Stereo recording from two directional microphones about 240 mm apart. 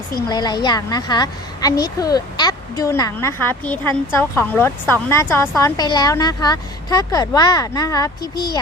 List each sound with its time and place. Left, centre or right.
0.3 s a woman's voice: centre